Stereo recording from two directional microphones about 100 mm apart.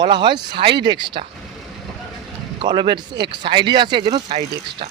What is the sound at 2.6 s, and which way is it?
Speech, 50° right (ahead or behind).